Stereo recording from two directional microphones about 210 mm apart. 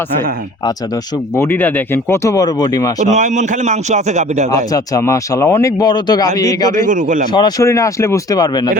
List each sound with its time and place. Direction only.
1.4 s speech: 10° left (ahead or behind)
3.1 s a man's voice: 35° right (ahead or behind)
4.5 s speech: 15° left (ahead or behind)
6.8 s a man's voice: 40° right (ahead or behind)
7.3 s speech: 15° left (ahead or behind)